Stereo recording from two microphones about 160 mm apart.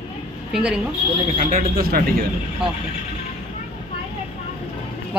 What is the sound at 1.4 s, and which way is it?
Speech, 60° right (ahead or behind).